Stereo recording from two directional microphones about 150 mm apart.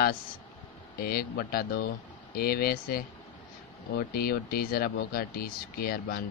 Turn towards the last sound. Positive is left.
turn(degrees=85)